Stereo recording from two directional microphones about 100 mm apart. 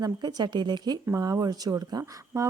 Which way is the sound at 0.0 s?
45° right (ahead or behind).